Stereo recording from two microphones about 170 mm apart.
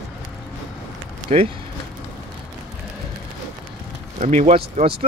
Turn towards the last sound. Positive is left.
turn(degrees=-35)  # may be behind; listen again after turning